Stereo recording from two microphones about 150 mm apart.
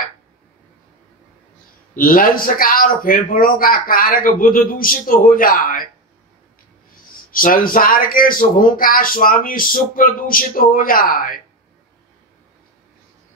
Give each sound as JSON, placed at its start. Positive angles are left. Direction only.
{"t": 2.0, "sound": "speech", "side_deg": 70}
{"t": 7.2, "sound": "speech", "side_deg": 70}